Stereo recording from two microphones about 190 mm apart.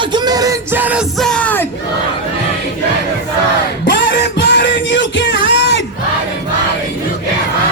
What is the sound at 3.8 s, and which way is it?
Music, 70° left (ahead or behind).